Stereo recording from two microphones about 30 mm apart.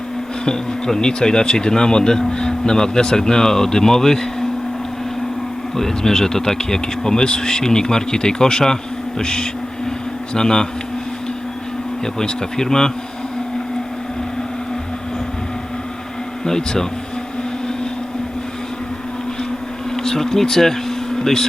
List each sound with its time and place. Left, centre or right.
0.4 s speech: centre
5.7 s speech: centre
12.2 s speech: centre
16.5 s speech: left
20.0 s speech: centre